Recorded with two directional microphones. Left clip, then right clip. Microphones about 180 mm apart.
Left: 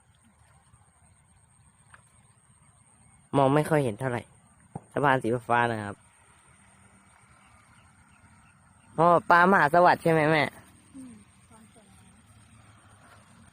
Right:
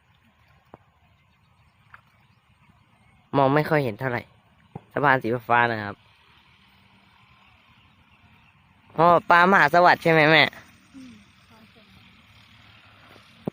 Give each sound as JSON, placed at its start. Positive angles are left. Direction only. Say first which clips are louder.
{"t": 3.3, "sound": "speech", "louder": "right 3 dB", "side_deg": 0}
{"t": 9.0, "sound": "speech", "louder": "right 3 dB", "side_deg": 0}